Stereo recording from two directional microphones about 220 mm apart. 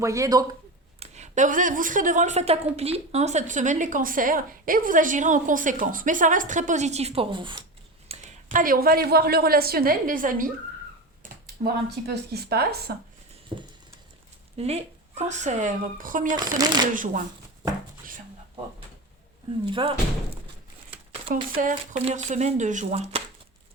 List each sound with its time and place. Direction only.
0.0 s a man's voice: 15° right (ahead or behind)
0.9 s a woman's voice: 30° right (ahead or behind)
14.5 s speech: 30° right (ahead or behind)
16.6 s speech: 20° right (ahead or behind)
16.9 s speech: 35° right (ahead or behind)
19.7 s speech: 25° right (ahead or behind)
21.5 s speech: 35° right (ahead or behind)